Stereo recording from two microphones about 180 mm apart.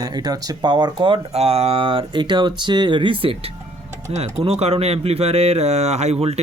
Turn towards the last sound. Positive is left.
turn(degrees=-35)  # may be behind; listen again after turning